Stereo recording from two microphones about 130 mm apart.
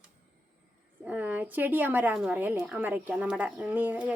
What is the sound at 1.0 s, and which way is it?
A woman's voice, 10° right (ahead or behind).